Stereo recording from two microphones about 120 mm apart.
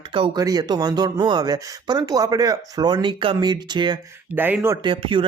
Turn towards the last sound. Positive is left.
turn(degrees=-45)  # may be behind; listen again after turning